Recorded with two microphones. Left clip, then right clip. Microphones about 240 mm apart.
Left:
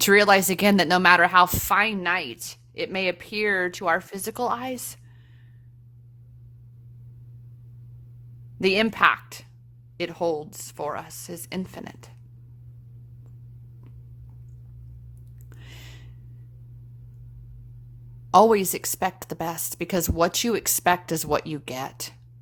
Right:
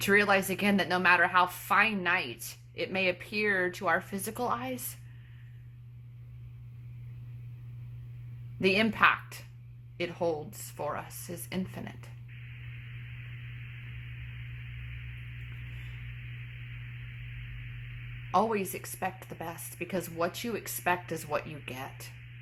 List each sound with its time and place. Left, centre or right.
0.0 s a woman's voice: left
8.6 s a woman's voice: left
18.3 s a woman's voice: left